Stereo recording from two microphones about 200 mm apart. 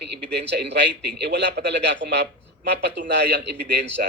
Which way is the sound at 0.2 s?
60° right (ahead or behind).